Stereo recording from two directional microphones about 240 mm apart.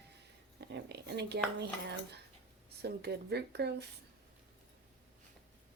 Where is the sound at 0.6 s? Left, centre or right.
Right.